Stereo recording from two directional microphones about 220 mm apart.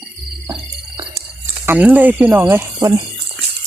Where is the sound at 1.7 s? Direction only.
5° right (ahead or behind).